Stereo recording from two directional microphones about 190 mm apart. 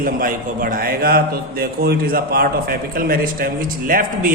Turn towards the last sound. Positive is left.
turn(degrees=-50)  # may be behind; listen again after turning